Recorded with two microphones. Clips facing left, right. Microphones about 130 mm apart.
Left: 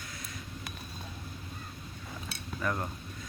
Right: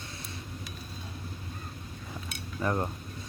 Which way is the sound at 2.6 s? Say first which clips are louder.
Right 4 dB; 30° right (ahead or behind).